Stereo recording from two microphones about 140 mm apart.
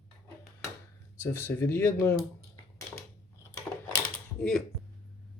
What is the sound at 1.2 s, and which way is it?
Speech, 15° left (ahead or behind).